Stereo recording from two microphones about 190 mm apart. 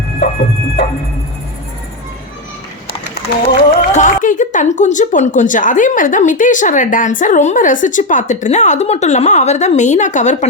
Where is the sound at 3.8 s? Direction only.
40° left (ahead or behind).